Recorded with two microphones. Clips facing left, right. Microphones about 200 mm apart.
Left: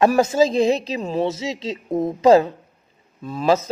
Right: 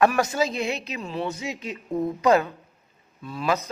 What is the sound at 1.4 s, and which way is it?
Speech, 25° left (ahead or behind).